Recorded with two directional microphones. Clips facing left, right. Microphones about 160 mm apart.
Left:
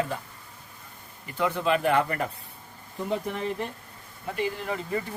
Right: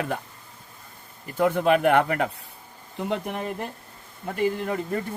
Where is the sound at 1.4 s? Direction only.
50° right (ahead or behind).